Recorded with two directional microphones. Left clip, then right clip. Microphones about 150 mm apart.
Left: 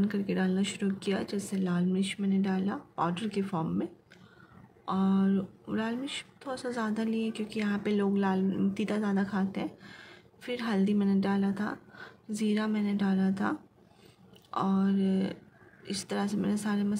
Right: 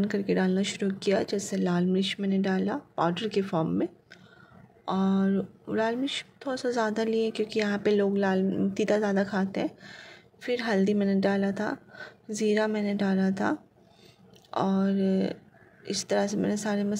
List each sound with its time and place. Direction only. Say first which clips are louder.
0.0 s speech: right 5 dB; 35° right (ahead or behind)